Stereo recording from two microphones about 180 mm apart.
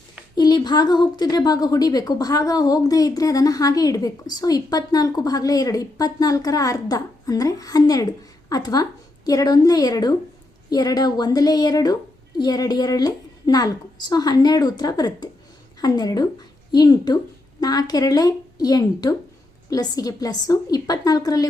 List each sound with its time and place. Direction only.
0.3 s a woman's voice: 25° left (ahead or behind)